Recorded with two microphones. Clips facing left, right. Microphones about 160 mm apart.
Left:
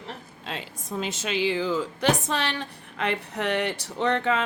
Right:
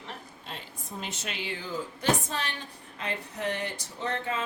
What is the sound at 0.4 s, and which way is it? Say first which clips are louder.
A woman's voice: left 9 dB; 90° left.